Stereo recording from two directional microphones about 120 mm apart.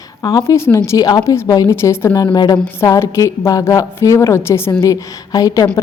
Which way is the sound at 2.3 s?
35° left (ahead or behind).